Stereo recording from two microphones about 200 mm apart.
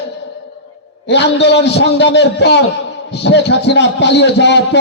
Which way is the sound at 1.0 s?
60° left (ahead or behind).